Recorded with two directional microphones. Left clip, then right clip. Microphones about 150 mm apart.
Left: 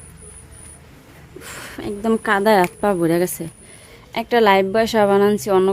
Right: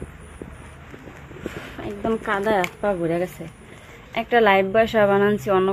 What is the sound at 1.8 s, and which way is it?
Speech, 65° left (ahead or behind).